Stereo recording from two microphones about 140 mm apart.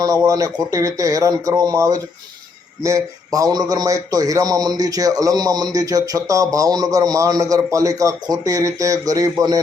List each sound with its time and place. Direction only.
0.0 s a man's voice: 25° right (ahead or behind)